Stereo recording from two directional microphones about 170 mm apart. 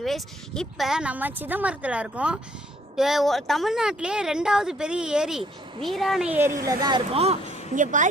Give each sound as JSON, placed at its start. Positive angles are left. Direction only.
{"t": 0.0, "sound": "a woman's voice", "side_deg": 0}
{"t": 7.1, "sound": "speech", "side_deg": -35}